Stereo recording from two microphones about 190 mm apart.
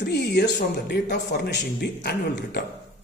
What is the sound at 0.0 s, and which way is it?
Speech, 60° left (ahead or behind).